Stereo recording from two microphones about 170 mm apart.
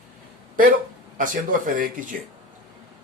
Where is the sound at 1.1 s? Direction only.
50° right (ahead or behind).